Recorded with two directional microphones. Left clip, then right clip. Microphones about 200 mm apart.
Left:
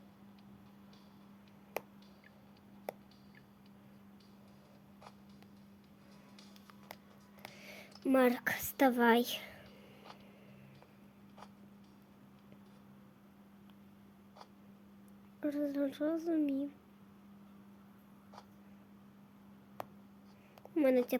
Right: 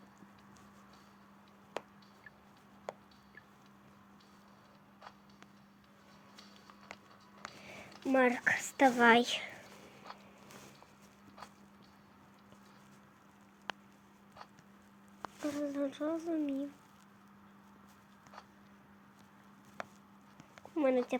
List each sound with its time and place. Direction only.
7.4 s a woman's voice: 20° left (ahead or behind); by 9.6 s 5° left (ahead or behind)
15.4 s a sound: 15° left (ahead or behind)
20.7 s speech: 20° left (ahead or behind)